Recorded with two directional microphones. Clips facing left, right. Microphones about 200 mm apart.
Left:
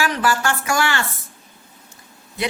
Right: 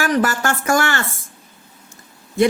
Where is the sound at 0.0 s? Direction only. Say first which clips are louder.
Right 2 dB; 45° right (ahead or behind).